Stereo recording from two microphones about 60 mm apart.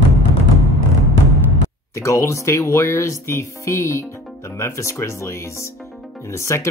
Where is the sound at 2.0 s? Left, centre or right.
Left.